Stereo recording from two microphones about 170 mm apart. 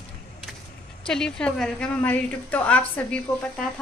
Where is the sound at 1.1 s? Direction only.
5° left (ahead or behind).